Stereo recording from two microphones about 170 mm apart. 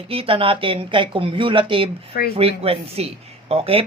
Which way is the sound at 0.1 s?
35° right (ahead or behind).